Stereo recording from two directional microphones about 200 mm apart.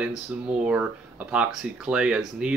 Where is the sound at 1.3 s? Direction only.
5° right (ahead or behind).